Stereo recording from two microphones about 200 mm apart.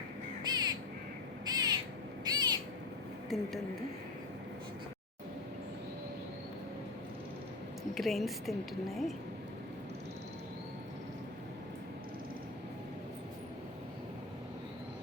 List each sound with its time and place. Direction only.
0.4 s crow: 20° right (ahead or behind)
2.2 s owl: 20° right (ahead or behind)
3.2 s speech: centre (ahead or behind)
7.9 s a woman's voice: centre (ahead or behind)